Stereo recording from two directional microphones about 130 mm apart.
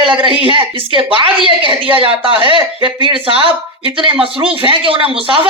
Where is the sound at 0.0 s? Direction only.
40° right (ahead or behind).